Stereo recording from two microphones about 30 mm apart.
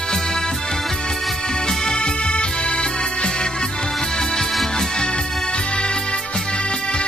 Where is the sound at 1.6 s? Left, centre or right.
Left.